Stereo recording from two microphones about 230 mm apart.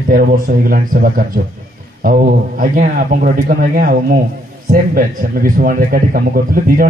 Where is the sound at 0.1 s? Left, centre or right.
Right.